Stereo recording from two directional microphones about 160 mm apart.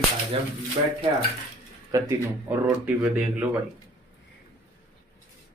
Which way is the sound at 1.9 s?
20° right (ahead or behind).